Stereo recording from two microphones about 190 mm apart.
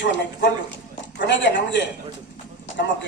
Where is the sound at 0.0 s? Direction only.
70° left (ahead or behind).